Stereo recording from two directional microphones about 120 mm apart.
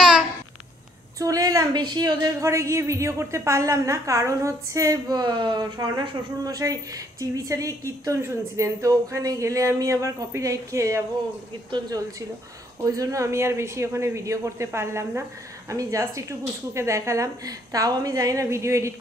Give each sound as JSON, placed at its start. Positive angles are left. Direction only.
{"t": 1.2, "sound": "a woman's voice", "side_deg": -30}
{"t": 2.4, "sound": "a woman's voice", "side_deg": -25}